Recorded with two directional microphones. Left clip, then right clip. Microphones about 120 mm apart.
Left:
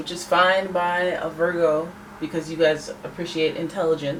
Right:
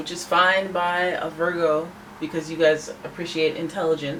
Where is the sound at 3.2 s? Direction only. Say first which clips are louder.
Even; 10° right (ahead or behind).